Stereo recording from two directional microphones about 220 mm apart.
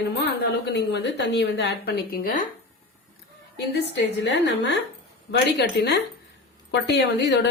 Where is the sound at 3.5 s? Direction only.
50° left (ahead or behind).